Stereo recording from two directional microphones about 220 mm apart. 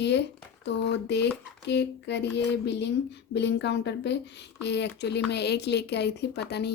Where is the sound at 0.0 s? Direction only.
50° left (ahead or behind).